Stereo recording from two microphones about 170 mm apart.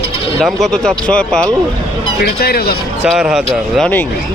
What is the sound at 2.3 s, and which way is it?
Speech, 70° left (ahead or behind).